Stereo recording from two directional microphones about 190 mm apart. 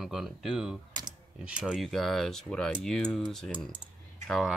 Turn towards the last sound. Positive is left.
turn(degrees=0)  # may be behind; listen again after turning